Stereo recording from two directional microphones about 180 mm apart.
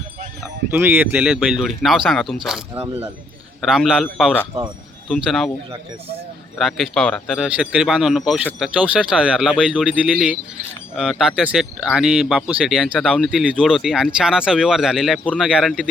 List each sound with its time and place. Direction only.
0.7 s speech: 10° right (ahead or behind)
2.7 s speech: 15° right (ahead or behind)
3.6 s speech: centre (ahead or behind)
6.6 s speech: centre (ahead or behind)